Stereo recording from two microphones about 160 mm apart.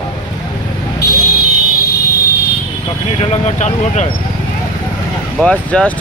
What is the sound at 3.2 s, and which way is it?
Speech, 40° left (ahead or behind).